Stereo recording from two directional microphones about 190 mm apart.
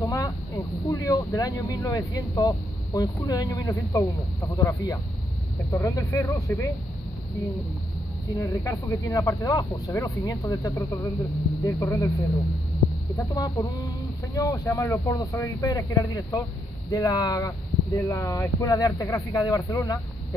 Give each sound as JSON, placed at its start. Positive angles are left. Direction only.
{"t": 0.0, "sound": "vehicle", "side_deg": 15}
{"t": 0.8, "sound": "speech", "side_deg": 20}
{"t": 8.4, "sound": "speech", "side_deg": 15}